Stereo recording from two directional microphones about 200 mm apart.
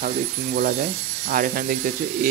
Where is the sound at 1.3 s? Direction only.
45° right (ahead or behind).